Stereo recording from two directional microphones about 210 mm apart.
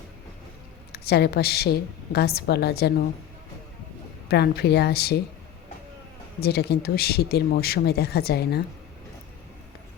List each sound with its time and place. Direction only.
0.9 s a woman's voice: 50° left (ahead or behind)
4.3 s speech: 50° left (ahead or behind)
6.4 s speech: 50° left (ahead or behind)